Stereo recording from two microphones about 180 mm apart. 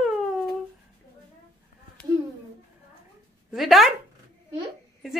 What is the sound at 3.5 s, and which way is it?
Speech, centre (ahead or behind).